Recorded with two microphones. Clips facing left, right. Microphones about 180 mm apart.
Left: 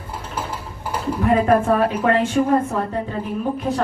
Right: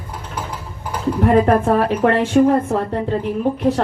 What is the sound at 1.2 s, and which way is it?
A woman's voice, 60° right (ahead or behind).